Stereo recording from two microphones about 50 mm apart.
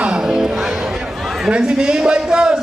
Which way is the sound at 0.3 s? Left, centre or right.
Centre.